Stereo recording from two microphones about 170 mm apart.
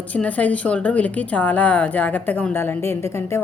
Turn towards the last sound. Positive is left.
turn(degrees=15)  # may be behind; listen again after turning